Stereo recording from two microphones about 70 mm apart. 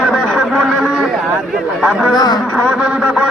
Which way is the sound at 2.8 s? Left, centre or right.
Centre.